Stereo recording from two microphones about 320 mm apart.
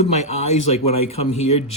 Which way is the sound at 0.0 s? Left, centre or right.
Left.